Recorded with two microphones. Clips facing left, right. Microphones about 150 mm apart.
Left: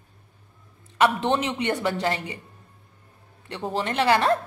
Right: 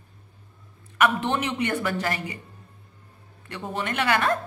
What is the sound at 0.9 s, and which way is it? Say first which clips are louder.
Speech: left 2 dB; 20° left (ahead or behind).